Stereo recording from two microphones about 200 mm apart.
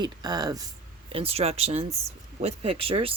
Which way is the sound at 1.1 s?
30° right (ahead or behind).